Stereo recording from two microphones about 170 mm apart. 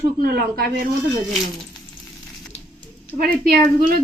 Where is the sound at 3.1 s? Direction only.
55° right (ahead or behind).